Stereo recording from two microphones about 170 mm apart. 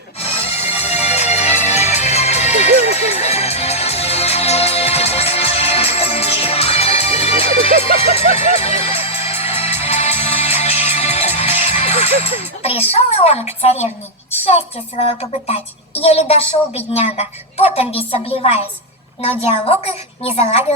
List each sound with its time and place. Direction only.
0.2 s music: 35° left (ahead or behind)
17.7 s a woman's voice: 35° left (ahead or behind)